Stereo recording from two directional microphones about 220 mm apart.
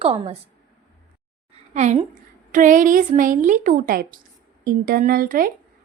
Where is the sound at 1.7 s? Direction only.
30° right (ahead or behind).